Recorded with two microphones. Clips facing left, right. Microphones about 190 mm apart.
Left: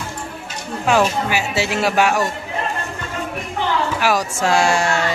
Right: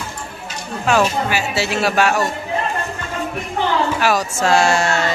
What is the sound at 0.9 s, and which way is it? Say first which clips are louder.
Speech: even; 15° left (ahead or behind).